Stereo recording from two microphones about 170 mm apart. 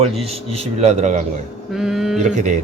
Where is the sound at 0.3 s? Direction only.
35° right (ahead or behind).